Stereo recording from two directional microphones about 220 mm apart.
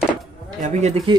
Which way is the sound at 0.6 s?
30° right (ahead or behind).